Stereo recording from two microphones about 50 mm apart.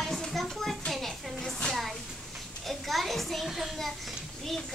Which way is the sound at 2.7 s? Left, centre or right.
Centre.